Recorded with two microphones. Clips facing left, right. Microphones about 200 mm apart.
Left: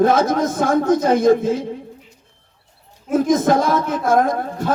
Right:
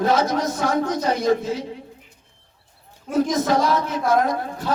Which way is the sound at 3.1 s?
50° left (ahead or behind).